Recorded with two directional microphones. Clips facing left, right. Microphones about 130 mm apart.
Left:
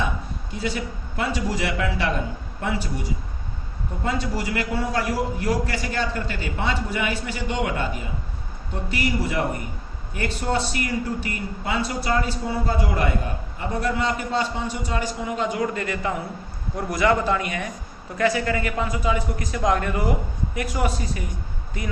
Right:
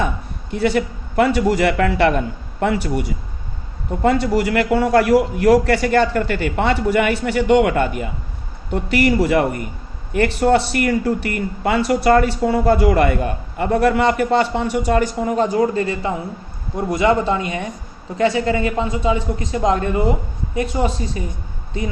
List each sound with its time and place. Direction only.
0.5 s a man's voice: 60° right (ahead or behind); by 21.2 s 30° right (ahead or behind)